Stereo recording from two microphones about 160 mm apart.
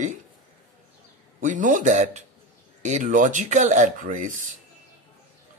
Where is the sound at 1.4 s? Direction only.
55° right (ahead or behind).